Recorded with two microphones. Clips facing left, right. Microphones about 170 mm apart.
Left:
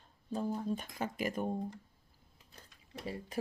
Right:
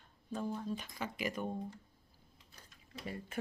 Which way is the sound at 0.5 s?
50° left (ahead or behind).